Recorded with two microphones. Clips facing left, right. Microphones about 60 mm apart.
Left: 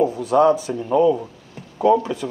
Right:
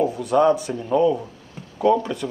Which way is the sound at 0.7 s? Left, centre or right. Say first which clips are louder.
Left 2 dB; centre.